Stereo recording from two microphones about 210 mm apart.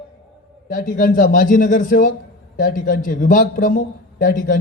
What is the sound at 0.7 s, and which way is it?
A man's voice, 40° left (ahead or behind).